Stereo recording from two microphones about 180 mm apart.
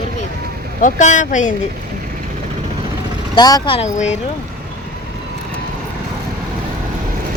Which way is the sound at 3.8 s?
40° left (ahead or behind).